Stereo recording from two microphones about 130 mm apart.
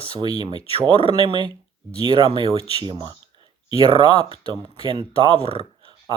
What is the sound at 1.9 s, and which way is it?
Speech, 45° left (ahead or behind).